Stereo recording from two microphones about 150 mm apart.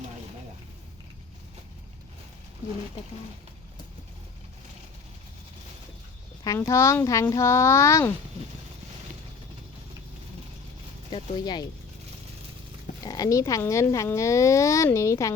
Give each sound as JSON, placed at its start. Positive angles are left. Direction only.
{"t": 6.4, "sound": "speech", "side_deg": 20}
{"t": 11.1, "sound": "speech", "side_deg": 30}
{"t": 13.0, "sound": "speech", "side_deg": 25}